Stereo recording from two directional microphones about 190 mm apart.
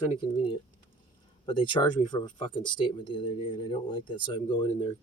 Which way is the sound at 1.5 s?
25° left (ahead or behind).